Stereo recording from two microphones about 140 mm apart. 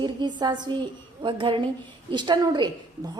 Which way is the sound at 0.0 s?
30° right (ahead or behind).